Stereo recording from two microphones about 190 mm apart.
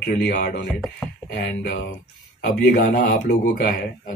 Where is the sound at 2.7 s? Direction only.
45° left (ahead or behind).